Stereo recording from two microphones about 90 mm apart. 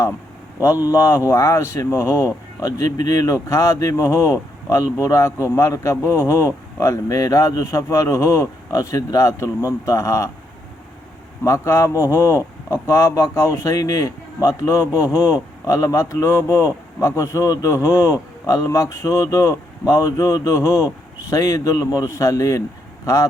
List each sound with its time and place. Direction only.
0.9 s a man's voice: 35° left (ahead or behind)
11.4 s a man's voice: 30° left (ahead or behind)